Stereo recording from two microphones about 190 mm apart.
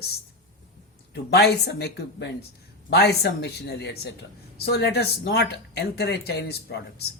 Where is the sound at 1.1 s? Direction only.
60° left (ahead or behind).